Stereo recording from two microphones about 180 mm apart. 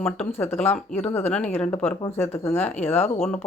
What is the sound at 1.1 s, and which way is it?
Speech, 10° left (ahead or behind).